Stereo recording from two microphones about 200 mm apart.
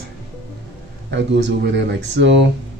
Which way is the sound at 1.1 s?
65° right (ahead or behind).